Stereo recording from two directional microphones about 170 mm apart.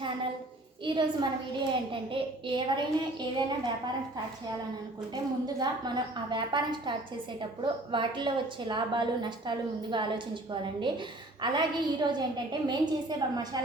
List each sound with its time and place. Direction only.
0.9 s a woman's voice: 25° right (ahead or behind)
5.1 s a woman's voice: 25° right (ahead or behind)